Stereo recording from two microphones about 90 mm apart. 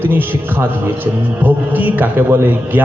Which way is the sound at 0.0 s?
25° right (ahead or behind).